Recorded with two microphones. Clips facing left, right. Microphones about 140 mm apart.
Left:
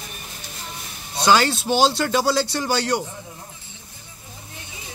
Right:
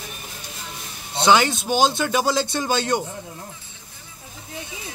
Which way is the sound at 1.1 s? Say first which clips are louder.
Even; 20° right (ahead or behind).